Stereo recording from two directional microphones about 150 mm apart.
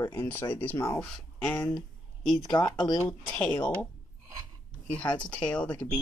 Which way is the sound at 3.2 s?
10° left (ahead or behind).